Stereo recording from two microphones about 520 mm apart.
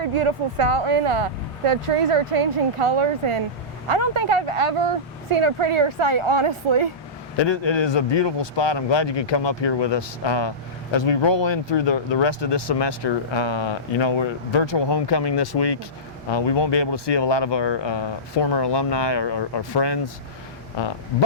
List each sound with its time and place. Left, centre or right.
0.0 s a woman's voice: right
7.3 s speech: left